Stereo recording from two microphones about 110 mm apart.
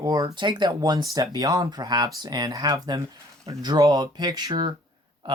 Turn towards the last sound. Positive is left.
turn(degrees=-40)  # may be behind; listen again after turning